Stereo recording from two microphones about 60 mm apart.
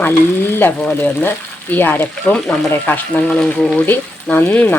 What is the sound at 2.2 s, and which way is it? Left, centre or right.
Speech, centre.